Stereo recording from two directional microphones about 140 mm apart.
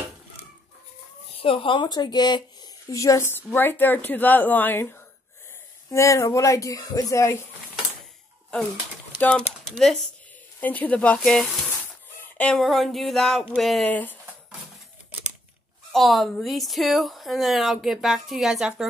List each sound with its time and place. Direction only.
1.4 s a woman's voice: 40° left (ahead or behind); by 7.3 s 25° left (ahead or behind)
9.2 s a woman's voice: 5° left (ahead or behind)
13.9 s speech: 10° left (ahead or behind)
15.9 s a woman's voice: centre (ahead or behind)